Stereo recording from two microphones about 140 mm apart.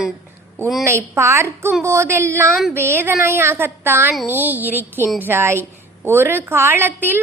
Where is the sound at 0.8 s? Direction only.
20° right (ahead or behind).